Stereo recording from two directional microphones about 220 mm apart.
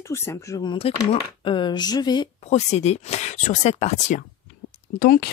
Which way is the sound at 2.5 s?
30° left (ahead or behind).